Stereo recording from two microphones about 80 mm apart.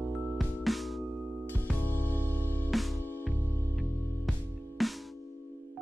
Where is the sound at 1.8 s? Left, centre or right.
Left.